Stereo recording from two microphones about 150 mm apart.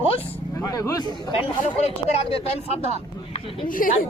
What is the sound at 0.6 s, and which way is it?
Speech, 20° left (ahead or behind).